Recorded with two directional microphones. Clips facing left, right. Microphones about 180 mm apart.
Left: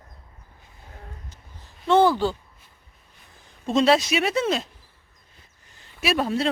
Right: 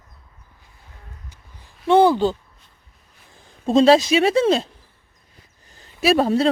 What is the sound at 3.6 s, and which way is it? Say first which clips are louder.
Speech: right 6 dB; 35° right (ahead or behind).